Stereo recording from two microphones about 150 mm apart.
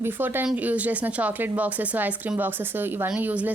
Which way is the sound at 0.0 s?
15° right (ahead or behind).